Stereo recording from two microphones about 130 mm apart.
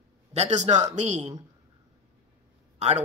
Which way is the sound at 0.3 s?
60° right (ahead or behind).